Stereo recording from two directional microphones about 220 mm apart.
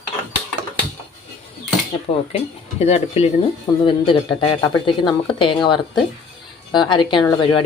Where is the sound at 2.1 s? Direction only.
25° left (ahead or behind).